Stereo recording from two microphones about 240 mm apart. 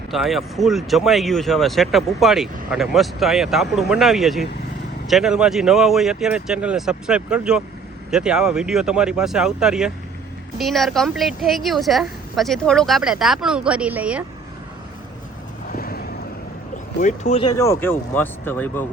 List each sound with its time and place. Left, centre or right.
0.1 s speech: centre
15.8 s vehicle: left
17.0 s speech: left
17.6 s speech: centre